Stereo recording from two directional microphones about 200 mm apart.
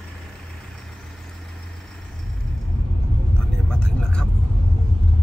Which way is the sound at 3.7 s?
5° left (ahead or behind).